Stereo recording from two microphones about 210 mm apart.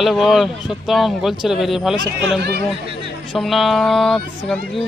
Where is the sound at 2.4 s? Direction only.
50° right (ahead or behind).